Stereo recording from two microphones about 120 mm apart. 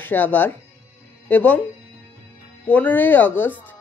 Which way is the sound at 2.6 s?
10° left (ahead or behind).